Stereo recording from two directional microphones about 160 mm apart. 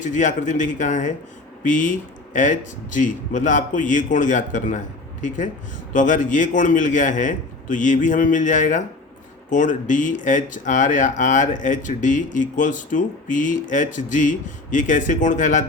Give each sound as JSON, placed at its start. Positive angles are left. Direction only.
{"t": 0.0, "sound": "speech", "side_deg": 50}
{"t": 5.9, "sound": "speech", "side_deg": 50}